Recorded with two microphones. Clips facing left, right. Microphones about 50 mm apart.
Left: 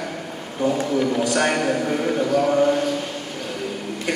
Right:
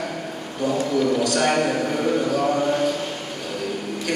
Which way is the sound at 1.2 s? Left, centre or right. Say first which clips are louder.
Left 1 dB; left.